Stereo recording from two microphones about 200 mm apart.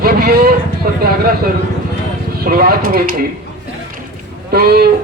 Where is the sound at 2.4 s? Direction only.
45° right (ahead or behind).